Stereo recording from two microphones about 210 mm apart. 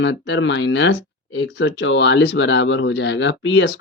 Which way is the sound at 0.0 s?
60° left (ahead or behind).